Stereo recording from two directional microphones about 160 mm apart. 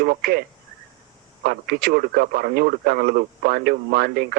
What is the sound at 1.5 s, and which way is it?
Speech, 70° right (ahead or behind).